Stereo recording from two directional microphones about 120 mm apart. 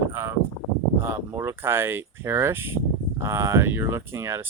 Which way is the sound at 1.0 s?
20° right (ahead or behind).